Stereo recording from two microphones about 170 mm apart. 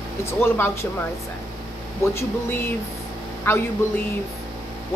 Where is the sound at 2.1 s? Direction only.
15° left (ahead or behind).